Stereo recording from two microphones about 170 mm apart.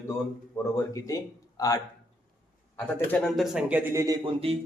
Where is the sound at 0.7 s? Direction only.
20° left (ahead or behind).